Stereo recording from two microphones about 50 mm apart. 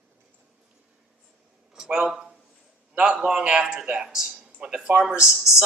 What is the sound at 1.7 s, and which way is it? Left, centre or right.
Speech, centre.